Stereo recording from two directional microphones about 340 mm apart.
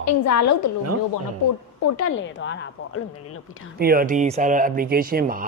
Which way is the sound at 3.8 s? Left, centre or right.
Right.